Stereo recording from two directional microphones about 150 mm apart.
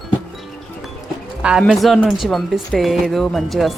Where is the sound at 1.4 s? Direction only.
5° right (ahead or behind).